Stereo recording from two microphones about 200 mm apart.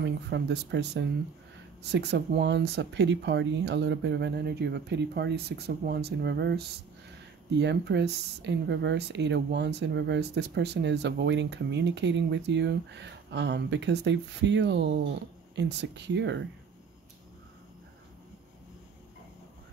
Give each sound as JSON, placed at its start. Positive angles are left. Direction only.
{"t": 0.0, "sound": "speech", "side_deg": -60}